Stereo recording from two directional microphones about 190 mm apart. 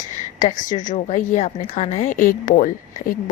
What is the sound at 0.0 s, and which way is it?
A woman's voice, 40° left (ahead or behind).